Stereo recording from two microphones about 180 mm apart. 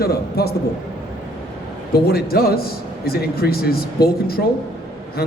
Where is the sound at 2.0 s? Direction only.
60° left (ahead or behind).